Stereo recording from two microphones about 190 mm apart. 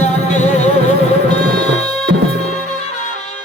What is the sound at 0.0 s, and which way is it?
Music, 35° left (ahead or behind).